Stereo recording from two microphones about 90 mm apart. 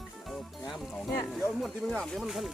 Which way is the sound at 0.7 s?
Centre (ahead or behind).